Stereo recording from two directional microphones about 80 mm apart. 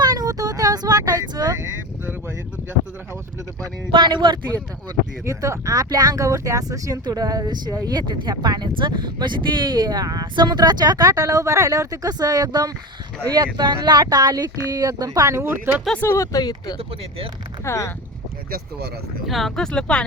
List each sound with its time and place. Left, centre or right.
0.0 s a sound: right
3.9 s speech: right
5.2 s speech: right
10.3 s speech: right
11.1 s speech: right
14.0 s speech: right
15.4 s speech: right
16.0 s speech: left
17.7 s speech: left
19.3 s speech: centre